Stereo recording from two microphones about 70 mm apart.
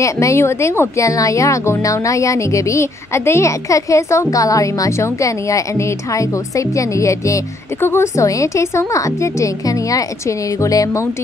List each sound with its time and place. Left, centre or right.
0.0 s speech: left
7.8 s speech: left